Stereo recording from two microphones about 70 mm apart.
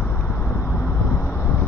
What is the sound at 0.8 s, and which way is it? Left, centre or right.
Vehicle, left.